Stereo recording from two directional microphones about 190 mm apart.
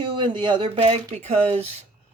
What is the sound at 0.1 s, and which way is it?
Speech, 25° right (ahead or behind).